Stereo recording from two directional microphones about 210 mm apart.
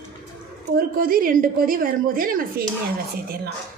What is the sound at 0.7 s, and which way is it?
A woman's voice, 45° right (ahead or behind).